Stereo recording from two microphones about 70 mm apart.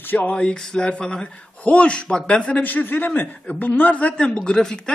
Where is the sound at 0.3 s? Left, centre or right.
Centre.